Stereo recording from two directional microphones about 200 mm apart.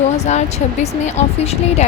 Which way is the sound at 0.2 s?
35° left (ahead or behind).